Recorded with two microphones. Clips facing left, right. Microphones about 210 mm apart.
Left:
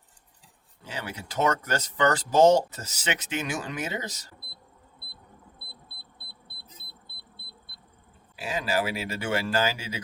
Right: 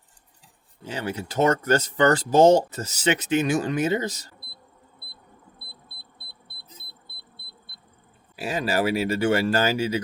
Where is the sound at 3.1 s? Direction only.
35° right (ahead or behind).